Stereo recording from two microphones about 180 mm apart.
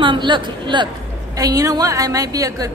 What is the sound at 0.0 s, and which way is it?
A woman's voice, 25° right (ahead or behind).